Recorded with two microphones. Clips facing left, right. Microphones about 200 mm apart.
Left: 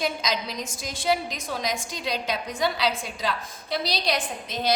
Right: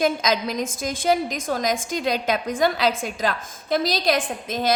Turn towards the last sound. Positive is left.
turn(degrees=-50)  # may be behind; listen again after turning